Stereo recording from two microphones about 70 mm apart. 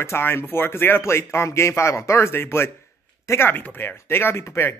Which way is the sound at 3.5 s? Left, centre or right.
Left.